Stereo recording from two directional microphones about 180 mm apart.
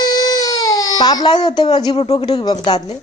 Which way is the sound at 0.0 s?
20° left (ahead or behind).